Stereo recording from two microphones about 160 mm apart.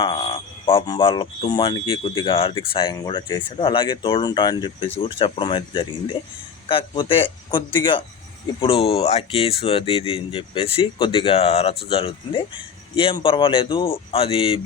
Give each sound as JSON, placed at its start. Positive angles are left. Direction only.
{"t": 0.0, "sound": "music", "side_deg": 30}
{"t": 0.9, "sound": "speech", "side_deg": 30}
{"t": 8.6, "sound": "speech", "side_deg": 35}